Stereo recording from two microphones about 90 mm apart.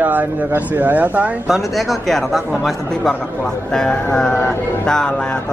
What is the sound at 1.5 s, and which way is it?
Speech, centre (ahead or behind).